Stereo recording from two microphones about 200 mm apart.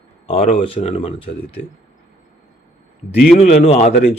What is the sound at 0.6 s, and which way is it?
Speech, 30° left (ahead or behind).